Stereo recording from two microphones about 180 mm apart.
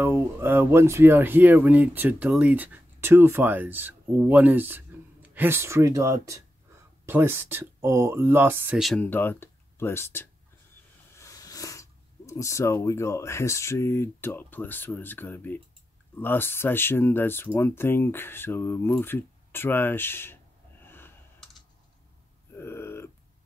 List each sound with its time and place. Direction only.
0.0 s speech: 15° right (ahead or behind); by 20.3 s 10° left (ahead or behind)
20.8 s snort: 10° left (ahead or behind)
22.6 s a sound: 15° left (ahead or behind)